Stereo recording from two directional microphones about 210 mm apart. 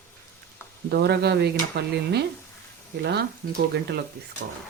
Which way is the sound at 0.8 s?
50° right (ahead or behind).